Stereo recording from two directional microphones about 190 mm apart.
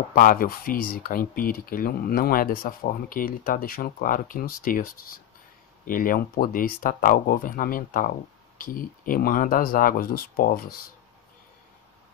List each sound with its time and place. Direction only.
0.1 s speech: 50° left (ahead or behind)